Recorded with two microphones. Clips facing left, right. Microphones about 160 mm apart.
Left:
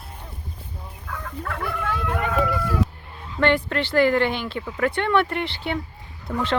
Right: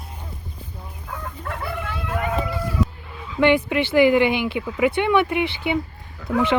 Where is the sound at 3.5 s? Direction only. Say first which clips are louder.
Right 3 dB; 10° right (ahead or behind).